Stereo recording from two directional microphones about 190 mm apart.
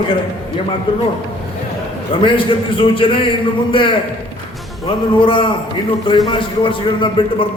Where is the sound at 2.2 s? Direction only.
25° left (ahead or behind).